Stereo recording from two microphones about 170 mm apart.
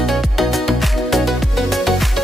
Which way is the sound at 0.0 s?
Centre (ahead or behind).